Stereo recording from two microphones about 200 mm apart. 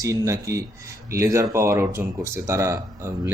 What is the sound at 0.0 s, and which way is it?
Speech, 15° right (ahead or behind).